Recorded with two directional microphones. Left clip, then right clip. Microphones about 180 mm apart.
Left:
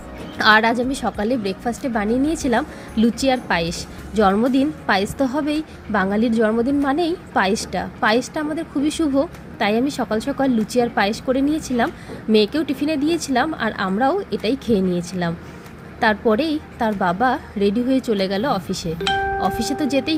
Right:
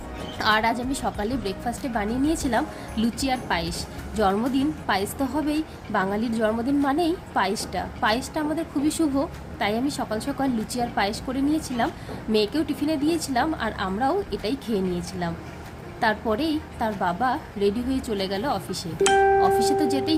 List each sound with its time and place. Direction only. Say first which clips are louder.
0.3 s a woman's voice: left 7 dB; 25° left (ahead or behind)